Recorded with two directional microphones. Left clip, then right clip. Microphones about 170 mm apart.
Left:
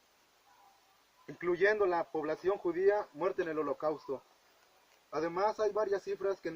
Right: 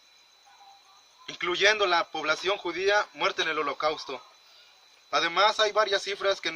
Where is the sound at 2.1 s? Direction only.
25° right (ahead or behind).